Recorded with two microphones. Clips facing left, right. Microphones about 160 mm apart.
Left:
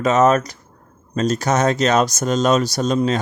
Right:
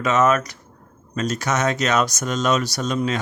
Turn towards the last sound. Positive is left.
turn(degrees=35)  # may be behind; listen again after turning